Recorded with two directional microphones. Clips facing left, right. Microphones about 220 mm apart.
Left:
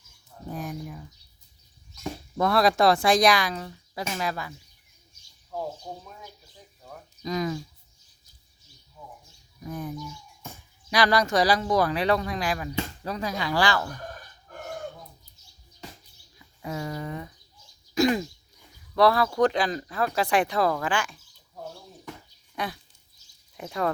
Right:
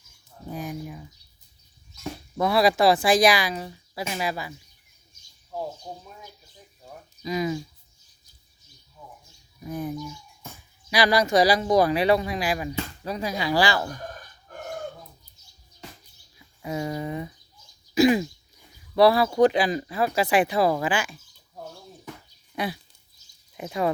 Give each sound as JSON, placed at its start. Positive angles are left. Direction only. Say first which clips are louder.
{"t": 0.5, "sound": "a sound", "louder": "right 2 dB", "side_deg": 0}
{"t": 2.4, "sound": "speech", "louder": "right 1 dB", "side_deg": -5}
{"t": 5.9, "sound": "speech", "louder": "even", "side_deg": -15}
{"t": 7.3, "sound": "speech", "louder": "right 2 dB", "side_deg": -10}
{"t": 10.9, "sound": "speech", "louder": "right 2 dB", "side_deg": -10}
{"t": 16.7, "sound": "speech", "louder": "right 4 dB", "side_deg": -15}
{"t": 17.9, "sound": "throat clearing", "louder": "right 4 dB", "side_deg": -5}
{"t": 18.9, "sound": "speech", "louder": "right 3 dB", "side_deg": -10}
{"t": 22.5, "sound": "speech", "louder": "right 3 dB", "side_deg": -10}